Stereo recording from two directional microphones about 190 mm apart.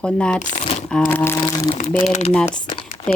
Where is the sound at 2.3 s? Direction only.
5° left (ahead or behind).